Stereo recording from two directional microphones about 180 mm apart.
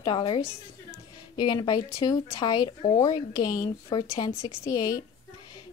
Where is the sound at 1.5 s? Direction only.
25° left (ahead or behind).